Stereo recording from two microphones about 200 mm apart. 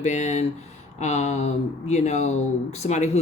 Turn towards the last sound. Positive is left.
turn(degrees=35)  # may be behind; listen again after turning